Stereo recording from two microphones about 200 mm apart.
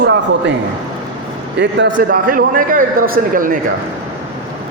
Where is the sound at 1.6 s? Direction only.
65° right (ahead or behind).